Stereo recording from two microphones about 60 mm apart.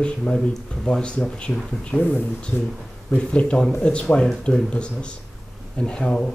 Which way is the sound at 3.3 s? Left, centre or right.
Centre.